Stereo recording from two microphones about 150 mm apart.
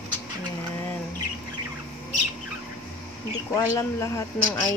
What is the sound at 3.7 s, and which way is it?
Speech, 20° left (ahead or behind).